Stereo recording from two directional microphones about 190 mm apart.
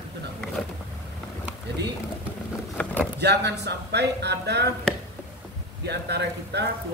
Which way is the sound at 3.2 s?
60° right (ahead or behind).